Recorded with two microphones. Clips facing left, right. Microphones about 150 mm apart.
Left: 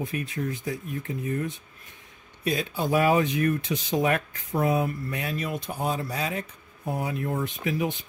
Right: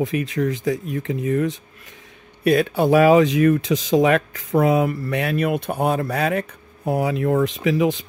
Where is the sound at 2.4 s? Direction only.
65° right (ahead or behind).